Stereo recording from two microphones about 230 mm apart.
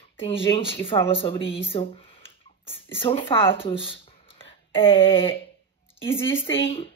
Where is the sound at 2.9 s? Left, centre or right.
Left.